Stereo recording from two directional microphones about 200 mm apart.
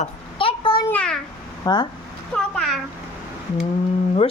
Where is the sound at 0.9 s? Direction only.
5° left (ahead or behind).